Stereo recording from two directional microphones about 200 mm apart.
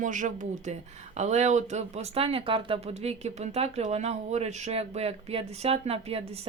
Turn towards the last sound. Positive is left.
turn(degrees=-30)  # may be behind; listen again after turning